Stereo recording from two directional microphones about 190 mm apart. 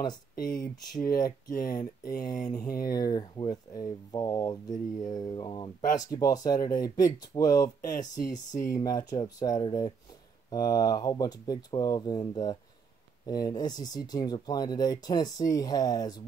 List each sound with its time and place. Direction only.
0.0 s speech: 20° left (ahead or behind)
1.8 s speech: 50° left (ahead or behind)
2.5 s speech: 20° left (ahead or behind)